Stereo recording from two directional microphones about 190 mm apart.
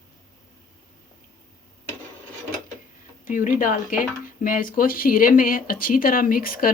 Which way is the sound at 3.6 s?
45° left (ahead or behind).